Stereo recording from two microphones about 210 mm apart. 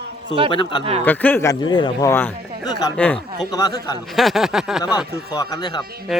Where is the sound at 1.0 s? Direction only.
10° left (ahead or behind).